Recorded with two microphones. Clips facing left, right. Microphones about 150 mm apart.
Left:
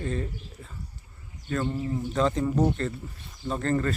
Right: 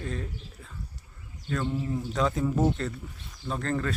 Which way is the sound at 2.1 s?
Centre (ahead or behind).